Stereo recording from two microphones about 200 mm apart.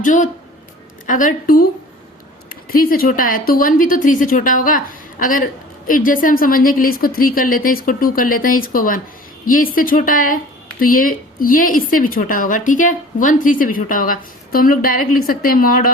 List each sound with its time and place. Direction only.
0.0 s speech: 40° left (ahead or behind)
2.6 s speech: 45° left (ahead or behind)